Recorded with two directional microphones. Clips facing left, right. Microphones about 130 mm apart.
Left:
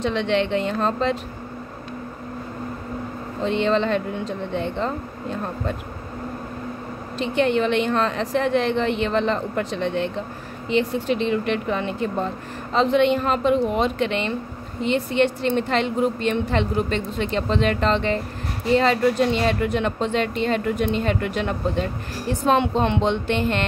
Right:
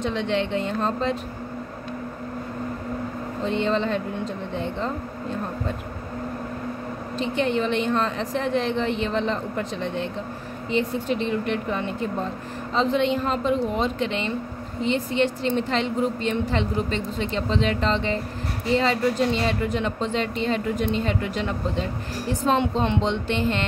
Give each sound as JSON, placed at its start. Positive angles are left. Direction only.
{"t": 0.0, "sound": "a woman's voice", "side_deg": 85}
{"t": 3.4, "sound": "a woman's voice", "side_deg": 85}
{"t": 7.2, "sound": "a woman's voice", "side_deg": 70}
{"t": 12.7, "sound": "a woman's voice", "side_deg": 65}